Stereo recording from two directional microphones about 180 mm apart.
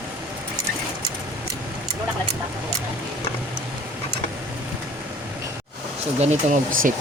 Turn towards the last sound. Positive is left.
turn(degrees=-45)  # may be behind; listen again after turning